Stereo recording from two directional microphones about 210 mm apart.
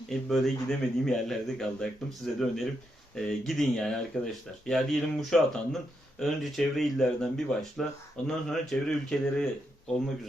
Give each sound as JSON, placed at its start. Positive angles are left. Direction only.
{"t": 0.1, "sound": "speech", "side_deg": 0}